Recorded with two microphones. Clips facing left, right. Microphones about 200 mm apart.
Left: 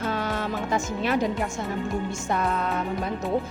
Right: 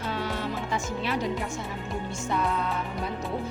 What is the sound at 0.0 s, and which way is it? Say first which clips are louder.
Music: left 3 dB; 45° left (ahead or behind).